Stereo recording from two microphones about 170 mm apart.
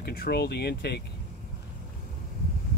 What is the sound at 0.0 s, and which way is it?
Speech, 65° left (ahead or behind).